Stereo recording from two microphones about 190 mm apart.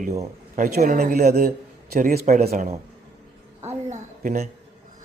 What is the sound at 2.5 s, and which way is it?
A man's voice, 35° right (ahead or behind).